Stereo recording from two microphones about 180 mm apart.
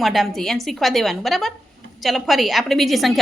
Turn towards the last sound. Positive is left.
turn(degrees=0)  # may be behind; listen again after turning